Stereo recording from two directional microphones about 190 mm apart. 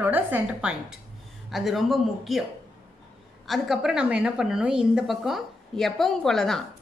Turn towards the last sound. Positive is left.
turn(degrees=0)  # may be behind; listen again after turning